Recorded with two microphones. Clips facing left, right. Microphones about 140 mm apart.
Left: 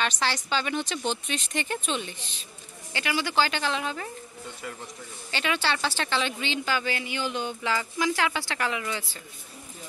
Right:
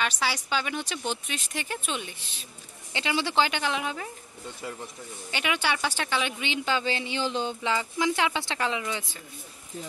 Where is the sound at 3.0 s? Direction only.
25° right (ahead or behind).